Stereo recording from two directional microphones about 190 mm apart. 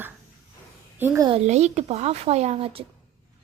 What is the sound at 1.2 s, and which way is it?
A child's voice, 35° right (ahead or behind).